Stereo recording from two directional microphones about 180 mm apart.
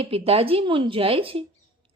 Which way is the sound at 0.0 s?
30° right (ahead or behind).